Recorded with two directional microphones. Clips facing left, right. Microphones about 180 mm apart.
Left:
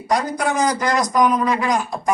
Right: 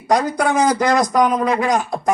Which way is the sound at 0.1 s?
50° right (ahead or behind).